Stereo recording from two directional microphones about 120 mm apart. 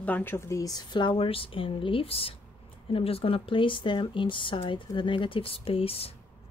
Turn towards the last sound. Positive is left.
turn(degrees=55)  # may be behind; listen again after turning